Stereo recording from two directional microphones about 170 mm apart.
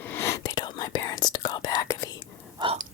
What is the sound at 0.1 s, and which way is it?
Whispering, 15° left (ahead or behind).